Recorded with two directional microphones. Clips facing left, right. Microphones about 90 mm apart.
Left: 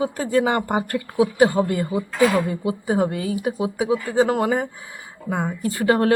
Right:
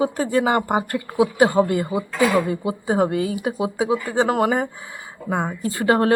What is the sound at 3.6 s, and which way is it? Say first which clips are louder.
Speech: right 3 dB; 20° right (ahead or behind).